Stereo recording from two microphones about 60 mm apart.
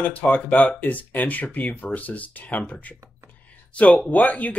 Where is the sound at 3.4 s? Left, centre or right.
Left.